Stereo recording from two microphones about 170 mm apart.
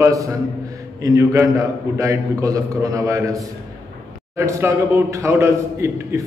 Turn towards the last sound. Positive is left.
turn(degrees=-15)  # may be behind; listen again after turning